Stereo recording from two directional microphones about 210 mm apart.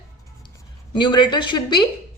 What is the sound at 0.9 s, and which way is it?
Speech, 20° left (ahead or behind).